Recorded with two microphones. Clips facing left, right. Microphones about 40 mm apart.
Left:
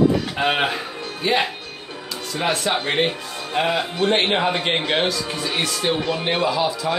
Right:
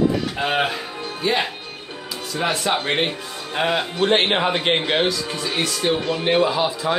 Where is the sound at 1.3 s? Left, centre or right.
Centre.